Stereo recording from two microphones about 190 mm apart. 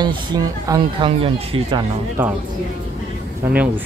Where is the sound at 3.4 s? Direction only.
10° right (ahead or behind).